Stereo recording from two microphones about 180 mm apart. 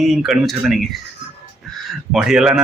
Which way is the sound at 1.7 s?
5° left (ahead or behind).